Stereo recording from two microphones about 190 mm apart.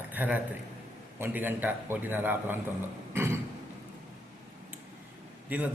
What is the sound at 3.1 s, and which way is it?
Cough, 10° right (ahead or behind).